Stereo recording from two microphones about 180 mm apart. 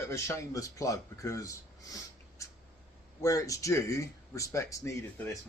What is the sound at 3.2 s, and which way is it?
Speech, 20° left (ahead or behind).